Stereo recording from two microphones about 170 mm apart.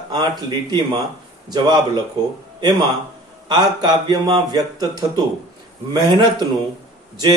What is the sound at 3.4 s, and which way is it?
Speech, 25° right (ahead or behind).